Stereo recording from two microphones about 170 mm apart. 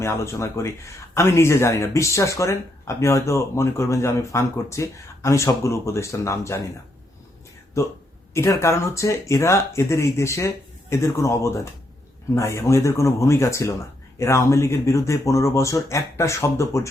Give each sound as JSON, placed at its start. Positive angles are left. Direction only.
{"t": 0.0, "sound": "speech", "side_deg": 15}
{"t": 8.3, "sound": "speech", "side_deg": 15}